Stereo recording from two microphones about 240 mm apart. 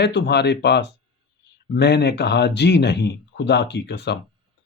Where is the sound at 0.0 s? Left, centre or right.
Left.